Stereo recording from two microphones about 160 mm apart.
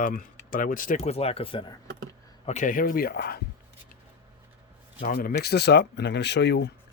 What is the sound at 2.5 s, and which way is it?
Speech, 55° left (ahead or behind).